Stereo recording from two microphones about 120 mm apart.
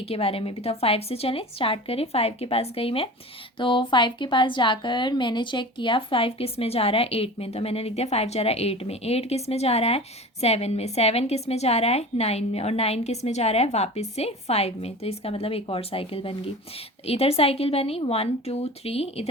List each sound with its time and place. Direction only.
0.0 s a woman's voice: 55° left (ahead or behind)